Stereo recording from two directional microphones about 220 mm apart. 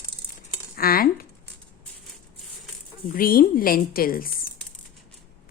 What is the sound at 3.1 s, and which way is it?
A woman's voice, 40° left (ahead or behind).